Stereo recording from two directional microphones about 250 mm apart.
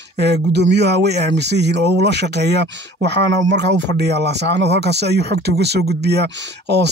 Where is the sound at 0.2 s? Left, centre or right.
Right.